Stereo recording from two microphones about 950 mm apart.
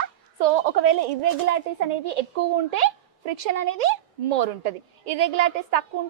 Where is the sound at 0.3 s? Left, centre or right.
Right.